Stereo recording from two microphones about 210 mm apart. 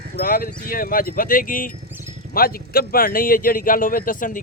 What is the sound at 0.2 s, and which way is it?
Speech, 45° left (ahead or behind).